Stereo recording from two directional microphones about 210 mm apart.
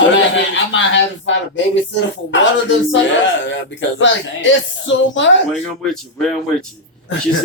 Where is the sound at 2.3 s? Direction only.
60° left (ahead or behind).